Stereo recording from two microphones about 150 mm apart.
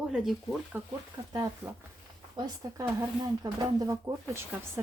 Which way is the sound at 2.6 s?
20° right (ahead or behind).